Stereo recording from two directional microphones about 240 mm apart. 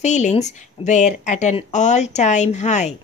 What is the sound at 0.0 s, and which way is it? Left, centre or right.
Speech, left.